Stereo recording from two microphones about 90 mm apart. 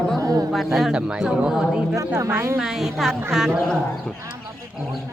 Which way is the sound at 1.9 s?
35° right (ahead or behind).